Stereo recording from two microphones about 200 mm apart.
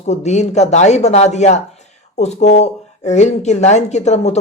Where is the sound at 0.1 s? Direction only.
35° left (ahead or behind).